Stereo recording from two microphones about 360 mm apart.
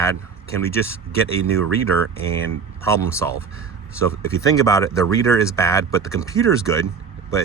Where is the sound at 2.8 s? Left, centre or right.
Centre.